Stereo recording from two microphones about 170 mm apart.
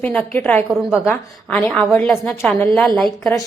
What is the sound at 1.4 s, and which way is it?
A woman's voice, 5° left (ahead or behind).